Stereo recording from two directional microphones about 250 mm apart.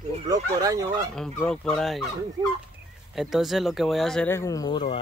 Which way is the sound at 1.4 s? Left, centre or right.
Centre.